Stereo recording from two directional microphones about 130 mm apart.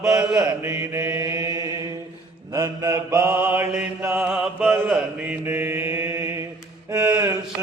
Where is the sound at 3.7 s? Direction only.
5° right (ahead or behind).